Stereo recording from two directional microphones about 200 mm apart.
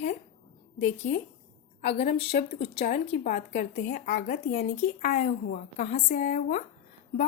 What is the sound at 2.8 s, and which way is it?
Speech, 40° left (ahead or behind).